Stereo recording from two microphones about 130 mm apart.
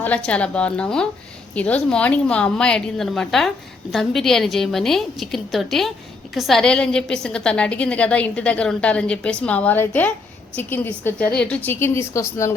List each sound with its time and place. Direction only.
0.0 s a woman's voice: 10° left (ahead or behind)